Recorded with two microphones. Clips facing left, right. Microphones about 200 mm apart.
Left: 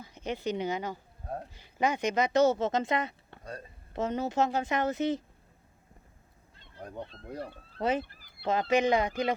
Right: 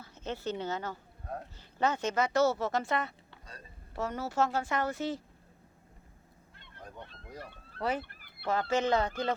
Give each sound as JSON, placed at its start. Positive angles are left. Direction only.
{"t": 0.0, "sound": "a woman's voice", "side_deg": 15}
{"t": 3.2, "sound": "music", "side_deg": 55}
{"t": 3.9, "sound": "speech", "side_deg": 20}
{"t": 7.8, "sound": "speech", "side_deg": 20}
{"t": 8.0, "sound": "fowl", "side_deg": -60}
{"t": 8.4, "sound": "speech", "side_deg": 20}